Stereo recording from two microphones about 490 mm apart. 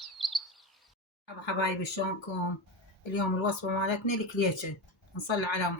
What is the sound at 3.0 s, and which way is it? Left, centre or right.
Speech, left.